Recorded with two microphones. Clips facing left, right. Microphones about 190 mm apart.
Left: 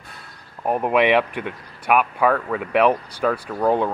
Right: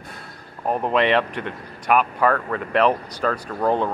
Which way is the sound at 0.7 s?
15° left (ahead or behind).